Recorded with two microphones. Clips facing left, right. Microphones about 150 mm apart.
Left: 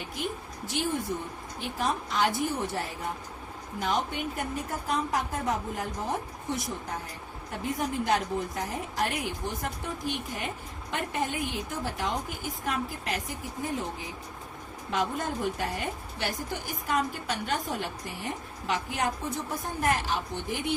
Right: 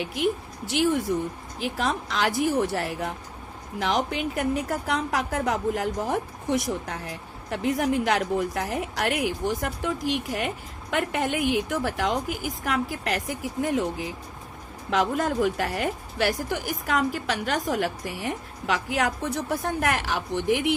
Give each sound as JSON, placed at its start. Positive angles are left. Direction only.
{"t": 0.0, "sound": "a woman's voice", "side_deg": -85}
{"t": 1.5, "sound": "a woman's voice", "side_deg": -90}
{"t": 14.8, "sound": "a woman's voice", "side_deg": -90}